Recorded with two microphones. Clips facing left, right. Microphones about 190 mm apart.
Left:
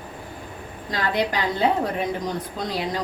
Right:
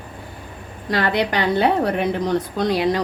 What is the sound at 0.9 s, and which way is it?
A woman's voice, 70° right (ahead or behind).